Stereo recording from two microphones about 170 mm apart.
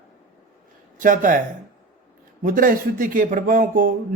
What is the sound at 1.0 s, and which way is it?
Speech, 50° right (ahead or behind).